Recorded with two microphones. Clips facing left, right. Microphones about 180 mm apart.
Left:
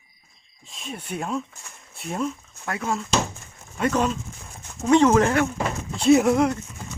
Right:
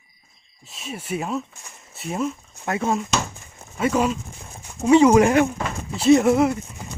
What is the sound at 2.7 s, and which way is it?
Speech, 25° right (ahead or behind).